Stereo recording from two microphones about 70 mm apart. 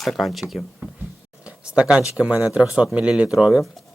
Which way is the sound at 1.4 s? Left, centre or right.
Centre.